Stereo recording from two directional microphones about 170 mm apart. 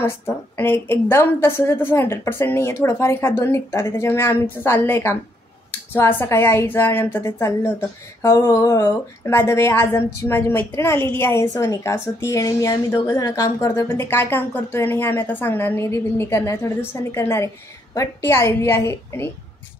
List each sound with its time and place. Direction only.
0.0 s speech: 15° left (ahead or behind)